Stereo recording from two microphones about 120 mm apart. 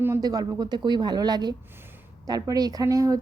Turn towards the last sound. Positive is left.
turn(degrees=-30)  # may be behind; listen again after turning